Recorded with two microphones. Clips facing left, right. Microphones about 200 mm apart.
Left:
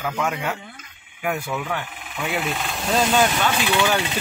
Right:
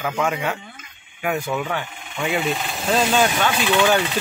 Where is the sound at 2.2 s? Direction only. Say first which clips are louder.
Right 3 dB; centre (ahead or behind).